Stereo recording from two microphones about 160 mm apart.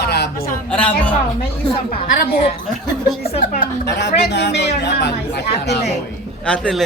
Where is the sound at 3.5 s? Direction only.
75° left (ahead or behind).